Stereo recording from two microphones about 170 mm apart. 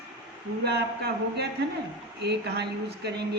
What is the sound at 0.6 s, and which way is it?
Speech, 75° right (ahead or behind).